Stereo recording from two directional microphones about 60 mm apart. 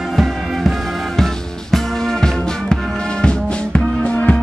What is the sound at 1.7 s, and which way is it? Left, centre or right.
Music, centre.